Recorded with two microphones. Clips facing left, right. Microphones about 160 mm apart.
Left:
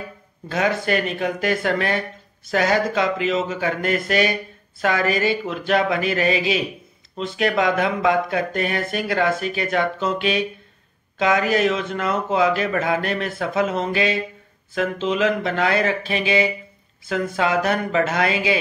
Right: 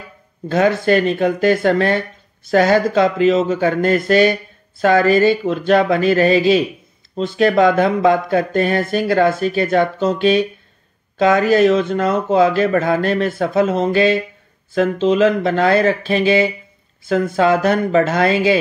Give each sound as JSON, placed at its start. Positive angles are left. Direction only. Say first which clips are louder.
{"t": 0.5, "sound": "speech", "louder": "right 7 dB", "side_deg": -35}